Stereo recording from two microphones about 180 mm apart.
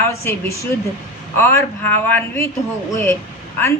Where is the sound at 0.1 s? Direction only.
15° left (ahead or behind).